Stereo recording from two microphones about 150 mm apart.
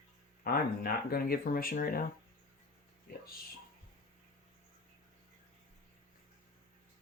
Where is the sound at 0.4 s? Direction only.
75° left (ahead or behind).